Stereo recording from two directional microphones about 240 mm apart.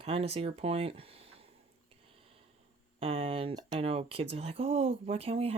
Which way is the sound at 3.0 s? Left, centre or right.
Right.